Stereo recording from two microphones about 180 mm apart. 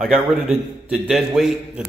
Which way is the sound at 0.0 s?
5° right (ahead or behind).